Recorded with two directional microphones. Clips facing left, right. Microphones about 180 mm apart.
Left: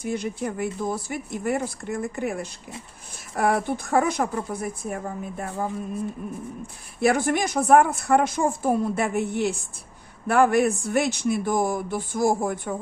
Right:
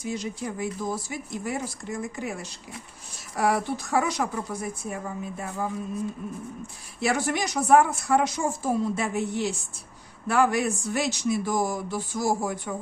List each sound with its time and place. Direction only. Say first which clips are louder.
0.0 s a woman's voice: left 4 dB; 55° left (ahead or behind)
7.0 s a woman's voice: left 5 dB; 55° left (ahead or behind)